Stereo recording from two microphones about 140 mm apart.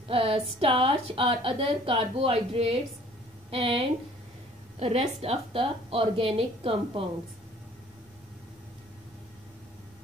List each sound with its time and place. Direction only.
0.1 s a woman's voice: 40° right (ahead or behind)